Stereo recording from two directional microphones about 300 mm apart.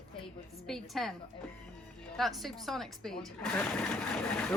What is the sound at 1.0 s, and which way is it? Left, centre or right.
Speech, centre.